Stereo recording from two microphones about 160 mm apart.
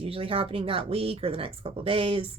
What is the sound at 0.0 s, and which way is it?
Speech, 35° right (ahead or behind).